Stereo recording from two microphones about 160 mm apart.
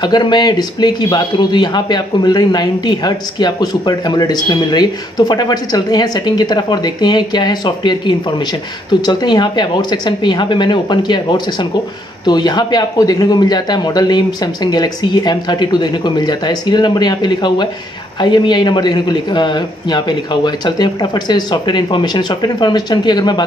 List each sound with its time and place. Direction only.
0.0 s speech: 25° left (ahead or behind)